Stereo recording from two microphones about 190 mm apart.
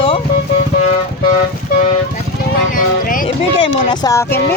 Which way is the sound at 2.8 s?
45° left (ahead or behind).